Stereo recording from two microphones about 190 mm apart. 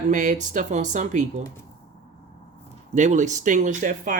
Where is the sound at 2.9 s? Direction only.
40° right (ahead or behind).